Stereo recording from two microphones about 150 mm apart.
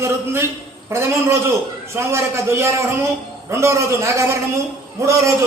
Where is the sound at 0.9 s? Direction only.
20° right (ahead or behind).